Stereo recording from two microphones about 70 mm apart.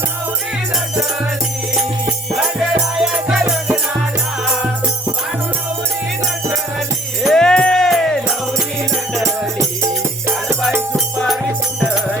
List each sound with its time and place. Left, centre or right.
2.3 s music: centre
6.5 s music: centre
9.6 s music: right